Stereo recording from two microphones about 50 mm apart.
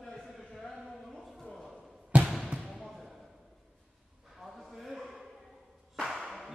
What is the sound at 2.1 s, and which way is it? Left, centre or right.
Basketball bounce, right.